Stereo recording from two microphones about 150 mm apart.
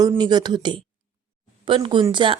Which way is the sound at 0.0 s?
25° right (ahead or behind).